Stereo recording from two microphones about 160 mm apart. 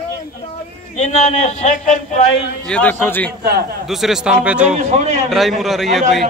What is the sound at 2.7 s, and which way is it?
Speech, 10° left (ahead or behind).